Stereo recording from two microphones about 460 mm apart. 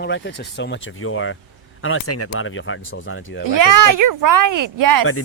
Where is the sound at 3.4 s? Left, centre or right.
Right.